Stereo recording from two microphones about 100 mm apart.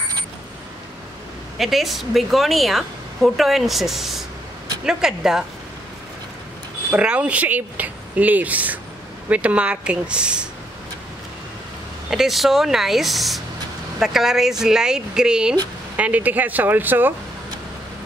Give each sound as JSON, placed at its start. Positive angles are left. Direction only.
{"t": 1.6, "sound": "a woman's voice", "side_deg": 0}
{"t": 6.9, "sound": "speech", "side_deg": -10}
{"t": 12.1, "sound": "a woman's voice", "side_deg": 0}